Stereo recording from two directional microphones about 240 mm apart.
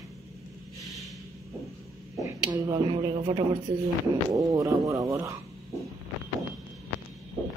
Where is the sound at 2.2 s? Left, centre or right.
Centre.